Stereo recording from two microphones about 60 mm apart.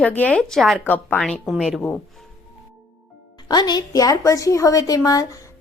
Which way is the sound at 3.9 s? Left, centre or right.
Left.